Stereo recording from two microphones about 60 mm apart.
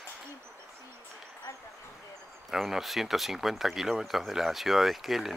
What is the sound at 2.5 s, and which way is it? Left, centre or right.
Speech, centre.